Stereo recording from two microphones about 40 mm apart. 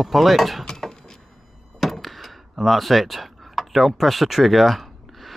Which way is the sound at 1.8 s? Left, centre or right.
Centre.